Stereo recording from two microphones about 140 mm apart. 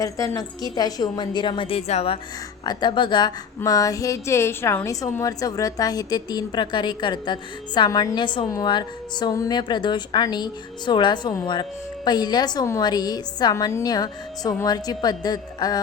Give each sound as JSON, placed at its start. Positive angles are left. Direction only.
{"t": 0.0, "sound": "a woman's voice", "side_deg": 25}
{"t": 2.6, "sound": "a woman's voice", "side_deg": 35}